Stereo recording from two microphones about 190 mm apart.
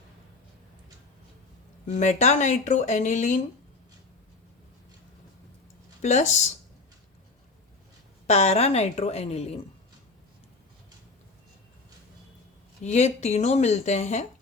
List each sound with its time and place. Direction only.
2.0 s speech: 40° left (ahead or behind)
6.0 s speech: 40° left (ahead or behind)
8.3 s speech: 35° left (ahead or behind)
12.8 s speech: 35° left (ahead or behind)